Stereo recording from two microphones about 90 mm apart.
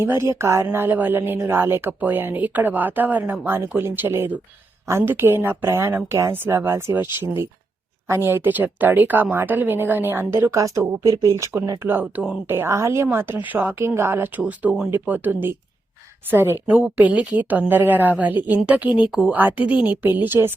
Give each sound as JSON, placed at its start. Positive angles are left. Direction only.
{"t": 0.0, "sound": "speech", "side_deg": -30}
{"t": 11.9, "sound": "speech", "side_deg": -20}
{"t": 18.9, "sound": "speech", "side_deg": 60}
{"t": 19.1, "sound": "speech", "side_deg": -15}